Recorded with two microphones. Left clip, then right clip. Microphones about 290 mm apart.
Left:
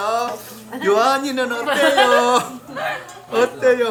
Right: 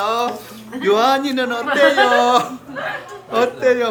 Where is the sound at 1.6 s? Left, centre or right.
Left.